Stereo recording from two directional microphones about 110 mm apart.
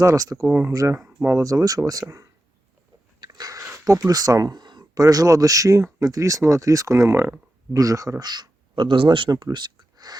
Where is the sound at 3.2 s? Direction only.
35° right (ahead or behind).